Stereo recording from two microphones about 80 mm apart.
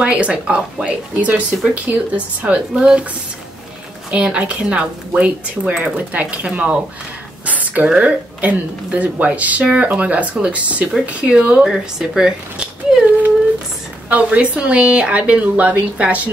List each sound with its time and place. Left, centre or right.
0.0 s a woman's voice: centre
4.1 s a woman's voice: centre
14.0 s a woman's voice: centre